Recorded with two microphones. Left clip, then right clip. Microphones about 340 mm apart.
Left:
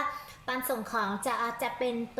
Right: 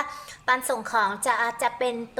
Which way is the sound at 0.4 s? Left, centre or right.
Right.